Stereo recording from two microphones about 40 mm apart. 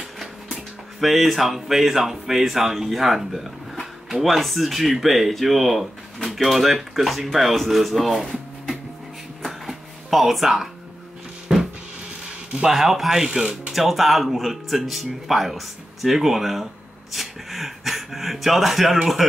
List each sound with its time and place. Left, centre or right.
1.0 s speech: centre
9.4 s music: centre
11.5 s music: centre
12.6 s speech: centre